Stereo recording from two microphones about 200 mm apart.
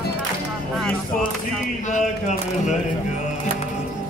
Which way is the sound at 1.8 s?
35° left (ahead or behind).